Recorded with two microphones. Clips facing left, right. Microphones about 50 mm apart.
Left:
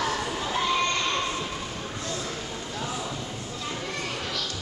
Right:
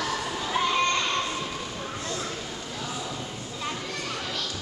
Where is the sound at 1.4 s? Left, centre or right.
Centre.